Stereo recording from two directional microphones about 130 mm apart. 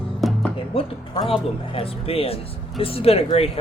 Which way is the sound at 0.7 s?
45° left (ahead or behind).